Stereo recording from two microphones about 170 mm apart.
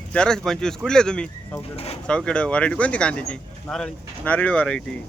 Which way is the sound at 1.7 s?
35° left (ahead or behind).